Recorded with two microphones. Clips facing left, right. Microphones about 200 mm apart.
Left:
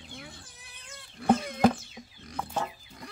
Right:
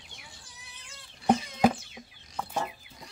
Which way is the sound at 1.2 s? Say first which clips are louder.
Left 1 dB; 55° left (ahead or behind).